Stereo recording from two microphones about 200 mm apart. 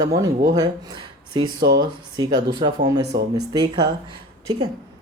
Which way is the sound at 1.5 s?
55° right (ahead or behind).